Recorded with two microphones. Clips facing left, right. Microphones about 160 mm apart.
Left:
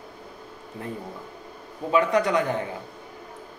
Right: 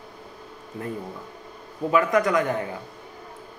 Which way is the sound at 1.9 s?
30° left (ahead or behind).